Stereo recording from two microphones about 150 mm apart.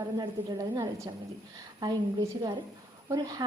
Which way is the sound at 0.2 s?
25° right (ahead or behind).